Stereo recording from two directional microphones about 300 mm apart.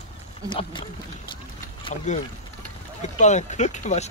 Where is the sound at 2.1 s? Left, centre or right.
Left.